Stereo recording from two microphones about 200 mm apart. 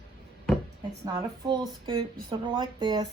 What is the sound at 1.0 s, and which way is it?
Speech, 20° right (ahead or behind).